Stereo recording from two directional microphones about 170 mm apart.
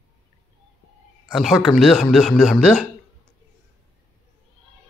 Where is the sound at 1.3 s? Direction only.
Centre (ahead or behind).